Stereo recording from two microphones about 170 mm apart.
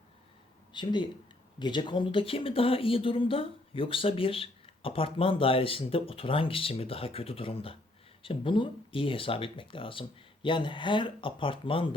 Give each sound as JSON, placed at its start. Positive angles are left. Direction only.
{"t": 0.7, "sound": "speech", "side_deg": 25}